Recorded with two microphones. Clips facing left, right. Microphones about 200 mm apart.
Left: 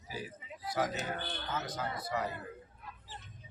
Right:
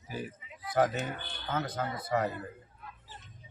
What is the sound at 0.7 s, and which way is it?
Speech, 50° right (ahead or behind).